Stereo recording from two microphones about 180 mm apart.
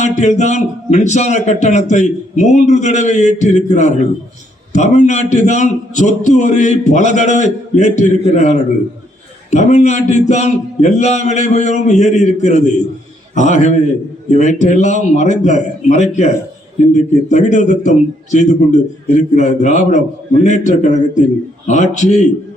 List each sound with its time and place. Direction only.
0.0 s a man's voice: 40° left (ahead or behind)